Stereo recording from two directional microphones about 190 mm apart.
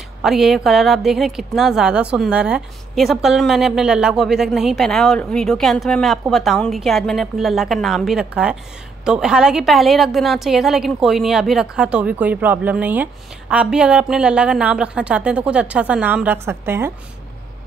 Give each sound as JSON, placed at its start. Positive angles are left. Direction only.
{"t": 0.2, "sound": "a woman's voice", "side_deg": 0}